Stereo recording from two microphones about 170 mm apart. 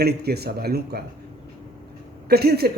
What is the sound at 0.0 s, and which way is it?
A man's voice, 70° right (ahead or behind).